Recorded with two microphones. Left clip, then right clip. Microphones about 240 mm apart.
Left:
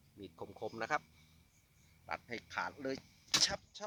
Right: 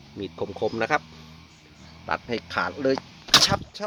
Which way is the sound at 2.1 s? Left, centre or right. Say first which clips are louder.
Right 15 dB; centre.